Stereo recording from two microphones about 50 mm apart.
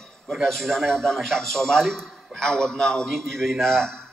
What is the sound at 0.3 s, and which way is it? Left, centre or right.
A man's voice, centre.